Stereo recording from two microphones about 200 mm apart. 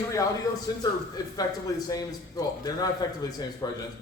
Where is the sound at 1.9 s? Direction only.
20° left (ahead or behind).